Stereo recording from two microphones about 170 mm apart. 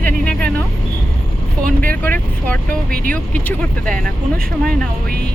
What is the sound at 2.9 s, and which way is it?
Speech, 60° right (ahead or behind).